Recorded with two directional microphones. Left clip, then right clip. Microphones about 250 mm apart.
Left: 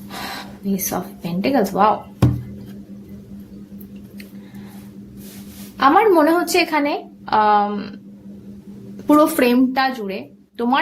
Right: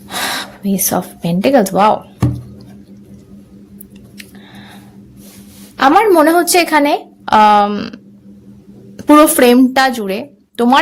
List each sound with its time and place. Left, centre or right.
0.1 s speech: right
5.7 s a woman's voice: right
9.0 s a woman's voice: right